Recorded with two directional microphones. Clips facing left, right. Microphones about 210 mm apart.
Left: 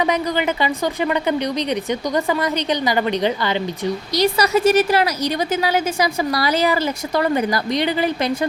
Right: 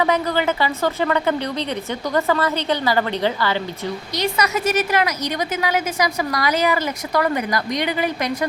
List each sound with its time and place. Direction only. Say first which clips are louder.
0.0 s a woman's voice: even; 20° left (ahead or behind)
4.1 s a woman's voice: left 5 dB; 35° left (ahead or behind)